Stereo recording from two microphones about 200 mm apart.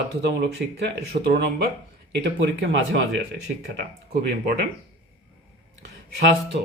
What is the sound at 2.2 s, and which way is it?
Speech, 65° right (ahead or behind).